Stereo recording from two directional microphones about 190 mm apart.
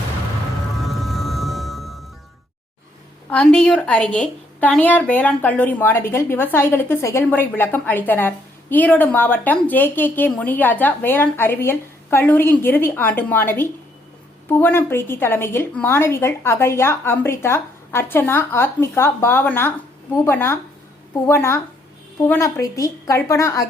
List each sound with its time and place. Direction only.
0.8 s music: centre (ahead or behind)
3.2 s a woman's voice: 5° left (ahead or behind)